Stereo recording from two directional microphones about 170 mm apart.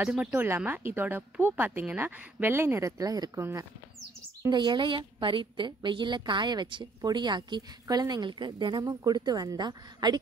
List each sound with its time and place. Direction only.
0.0 s a woman's voice: 5° right (ahead or behind); by 10.1 s 25° right (ahead or behind)